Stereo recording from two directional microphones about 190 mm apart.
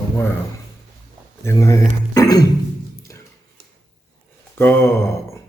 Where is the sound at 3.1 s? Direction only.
15° left (ahead or behind).